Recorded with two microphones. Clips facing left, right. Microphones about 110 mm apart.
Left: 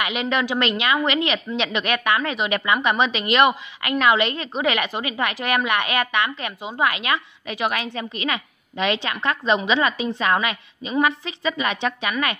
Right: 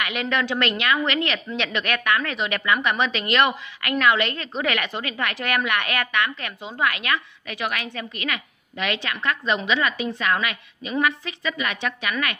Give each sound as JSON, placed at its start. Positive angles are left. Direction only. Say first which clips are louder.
{"t": 0.0, "sound": "a woman's voice", "louder": "left 2 dB", "side_deg": 20}